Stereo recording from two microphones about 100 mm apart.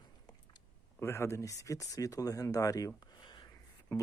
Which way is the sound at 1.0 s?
25° left (ahead or behind).